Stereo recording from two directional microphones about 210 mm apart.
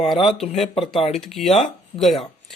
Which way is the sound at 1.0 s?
30° left (ahead or behind).